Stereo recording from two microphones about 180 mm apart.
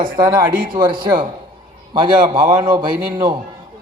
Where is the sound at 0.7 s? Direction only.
25° right (ahead or behind).